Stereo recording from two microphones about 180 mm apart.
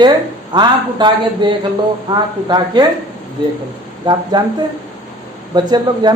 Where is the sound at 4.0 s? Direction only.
25° right (ahead or behind).